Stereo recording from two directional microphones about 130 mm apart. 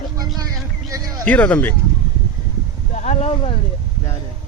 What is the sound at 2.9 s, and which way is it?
Speech, 60° left (ahead or behind).